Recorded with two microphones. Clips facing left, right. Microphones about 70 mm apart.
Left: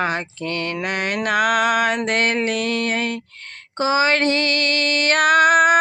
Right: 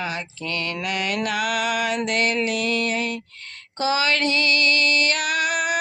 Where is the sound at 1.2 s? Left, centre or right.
Left.